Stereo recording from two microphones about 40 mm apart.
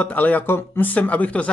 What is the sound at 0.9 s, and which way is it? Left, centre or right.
Speech, left.